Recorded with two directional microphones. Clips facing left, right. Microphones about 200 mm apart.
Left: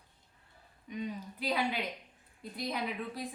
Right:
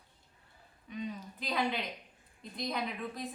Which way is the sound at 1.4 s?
10° left (ahead or behind).